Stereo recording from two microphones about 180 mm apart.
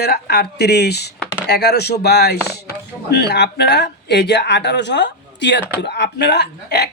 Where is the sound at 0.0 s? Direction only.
65° left (ahead or behind).